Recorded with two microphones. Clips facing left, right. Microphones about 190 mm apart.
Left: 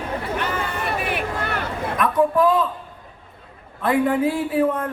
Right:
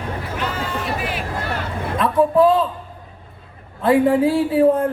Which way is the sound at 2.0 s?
30° right (ahead or behind).